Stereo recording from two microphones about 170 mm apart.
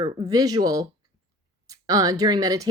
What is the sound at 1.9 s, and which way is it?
Speech, 20° right (ahead or behind).